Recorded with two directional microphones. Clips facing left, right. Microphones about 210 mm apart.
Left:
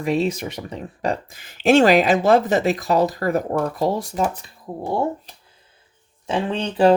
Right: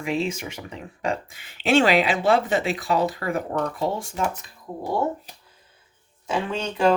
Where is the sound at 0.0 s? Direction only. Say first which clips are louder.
Left 5 dB; 40° left (ahead or behind).